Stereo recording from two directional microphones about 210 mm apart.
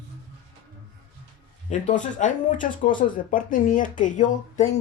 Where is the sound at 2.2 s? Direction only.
40° left (ahead or behind).